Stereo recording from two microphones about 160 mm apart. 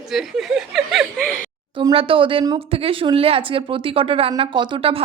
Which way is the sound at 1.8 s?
35° right (ahead or behind).